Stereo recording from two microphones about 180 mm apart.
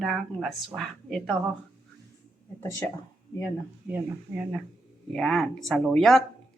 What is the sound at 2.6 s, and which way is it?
Speech, 15° left (ahead or behind).